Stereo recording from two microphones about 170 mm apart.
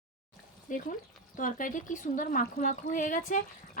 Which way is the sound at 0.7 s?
50° left (ahead or behind).